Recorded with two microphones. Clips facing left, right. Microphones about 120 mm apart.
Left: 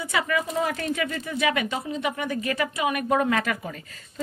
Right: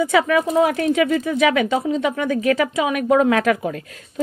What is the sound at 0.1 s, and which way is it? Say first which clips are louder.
Speech: right 9 dB; 90° right.